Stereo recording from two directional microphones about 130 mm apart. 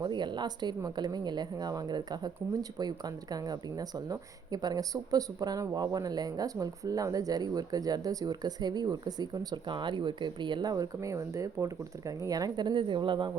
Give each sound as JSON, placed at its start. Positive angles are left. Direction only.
{"t": 0.0, "sound": "a woman's voice", "side_deg": -35}